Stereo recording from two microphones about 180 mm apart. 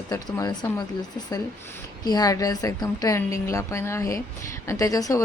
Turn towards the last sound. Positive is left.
turn(degrees=20)  # may be behind; listen again after turning